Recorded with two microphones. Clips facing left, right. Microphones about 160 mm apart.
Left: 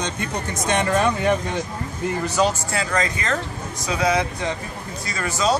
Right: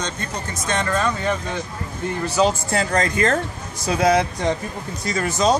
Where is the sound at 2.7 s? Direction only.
40° right (ahead or behind).